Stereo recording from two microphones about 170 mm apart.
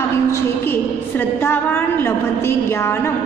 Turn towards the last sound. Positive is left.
turn(degrees=15)  # may be behind; listen again after turning